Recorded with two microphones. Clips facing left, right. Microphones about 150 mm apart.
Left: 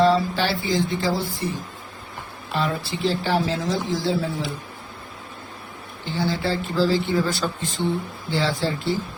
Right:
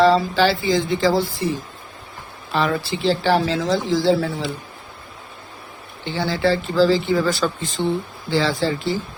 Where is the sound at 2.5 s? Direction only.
90° right.